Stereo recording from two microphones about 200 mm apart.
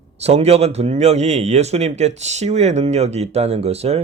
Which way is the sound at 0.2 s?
30° right (ahead or behind).